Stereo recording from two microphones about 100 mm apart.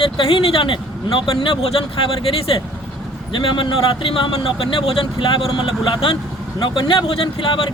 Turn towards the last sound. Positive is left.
turn(degrees=55)  # may be behind; listen again after turning